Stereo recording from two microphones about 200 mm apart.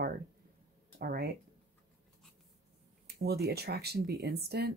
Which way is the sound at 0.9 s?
50° right (ahead or behind).